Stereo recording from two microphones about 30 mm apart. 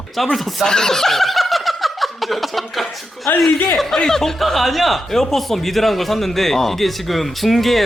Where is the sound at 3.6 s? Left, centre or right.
Centre.